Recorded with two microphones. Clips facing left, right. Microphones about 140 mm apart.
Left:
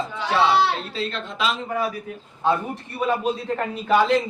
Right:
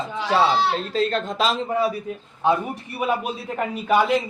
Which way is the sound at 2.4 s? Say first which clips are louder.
Right 1 dB; 15° right (ahead or behind).